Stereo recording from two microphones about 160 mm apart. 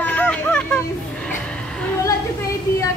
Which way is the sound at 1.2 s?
10° left (ahead or behind).